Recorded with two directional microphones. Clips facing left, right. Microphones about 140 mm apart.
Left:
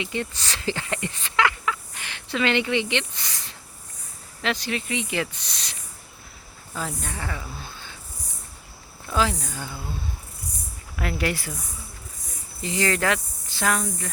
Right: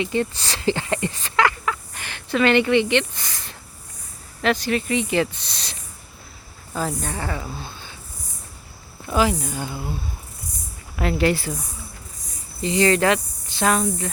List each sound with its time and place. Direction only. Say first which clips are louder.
0.0 s speech: right 6 dB; 35° right (ahead or behind)
6.7 s speech: right 6 dB; 40° right (ahead or behind)
9.0 s speech: right 4 dB; 15° right (ahead or behind)
10.9 s speech: right 6 dB; 25° right (ahead or behind)
12.6 s speech: right 6 dB; 25° right (ahead or behind)